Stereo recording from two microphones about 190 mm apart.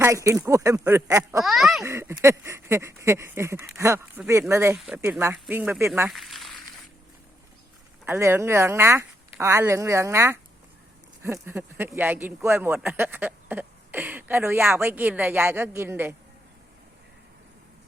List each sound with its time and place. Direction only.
0.0 s speech: 15° right (ahead or behind)
1.5 s speech: centre (ahead or behind)
1.8 s speech: 15° right (ahead or behind)
6.1 s a sound: centre (ahead or behind)
8.0 s speech: 15° right (ahead or behind)